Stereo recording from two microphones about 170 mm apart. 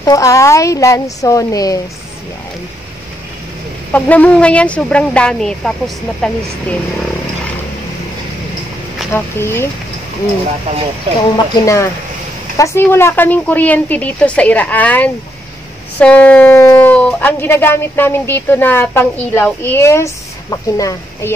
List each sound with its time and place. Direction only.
0.0 s speech: 20° left (ahead or behind)
3.9 s a woman's voice: 10° left (ahead or behind)
9.1 s speech: 15° left (ahead or behind)
11.3 s speech: 20° left (ahead or behind)